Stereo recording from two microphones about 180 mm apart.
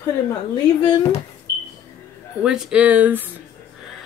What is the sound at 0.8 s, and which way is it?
Speech, 25° left (ahead or behind).